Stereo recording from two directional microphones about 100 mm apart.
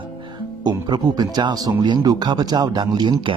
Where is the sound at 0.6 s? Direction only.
45° right (ahead or behind).